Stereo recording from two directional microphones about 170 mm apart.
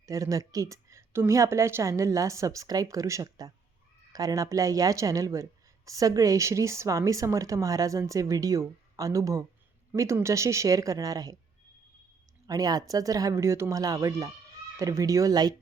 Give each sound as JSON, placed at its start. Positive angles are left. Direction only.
{"t": 0.0, "sound": "speech", "side_deg": -20}
{"t": 12.5, "sound": "speech", "side_deg": -20}